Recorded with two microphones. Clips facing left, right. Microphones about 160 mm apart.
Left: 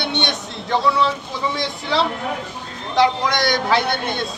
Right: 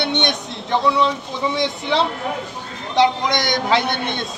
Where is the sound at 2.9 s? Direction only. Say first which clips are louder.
Even; 20° right (ahead or behind).